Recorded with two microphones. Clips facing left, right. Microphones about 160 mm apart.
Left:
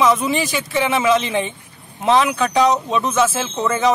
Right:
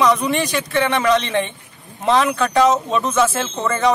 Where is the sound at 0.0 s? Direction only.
Centre (ahead or behind).